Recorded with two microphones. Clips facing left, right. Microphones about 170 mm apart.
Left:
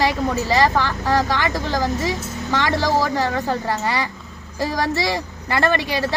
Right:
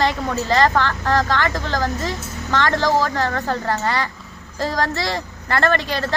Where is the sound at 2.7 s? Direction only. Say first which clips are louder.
Right 1 dB; 20° right (ahead or behind).